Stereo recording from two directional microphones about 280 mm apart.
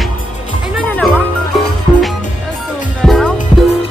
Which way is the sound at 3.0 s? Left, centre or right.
Centre.